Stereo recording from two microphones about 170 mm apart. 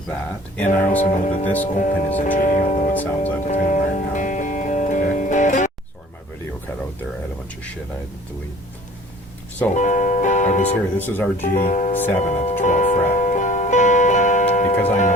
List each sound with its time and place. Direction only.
0.1 s speech: 10° left (ahead or behind)
0.9 s speech: 45° left (ahead or behind)
2.9 s speech: 10° left (ahead or behind)
3.4 s music: 45° left (ahead or behind)
9.7 s music: 45° left (ahead or behind)
10.9 s speech: 10° left (ahead or behind)
11.5 s speech: 50° left (ahead or behind)
12.6 s music: 50° left (ahead or behind)
14.8 s speech: 45° left (ahead or behind)